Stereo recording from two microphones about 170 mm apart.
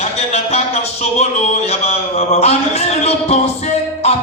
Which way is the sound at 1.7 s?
40° left (ahead or behind).